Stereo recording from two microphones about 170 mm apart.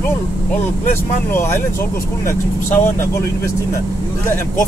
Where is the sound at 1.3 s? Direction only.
15° left (ahead or behind).